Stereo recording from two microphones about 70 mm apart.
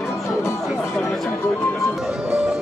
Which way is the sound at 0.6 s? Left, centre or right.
Centre.